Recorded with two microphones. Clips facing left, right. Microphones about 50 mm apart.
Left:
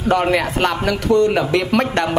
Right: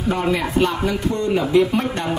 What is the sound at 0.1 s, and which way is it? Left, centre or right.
A man's voice, left.